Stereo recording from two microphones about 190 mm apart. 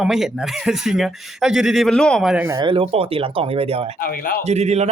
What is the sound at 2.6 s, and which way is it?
Speech, 25° right (ahead or behind).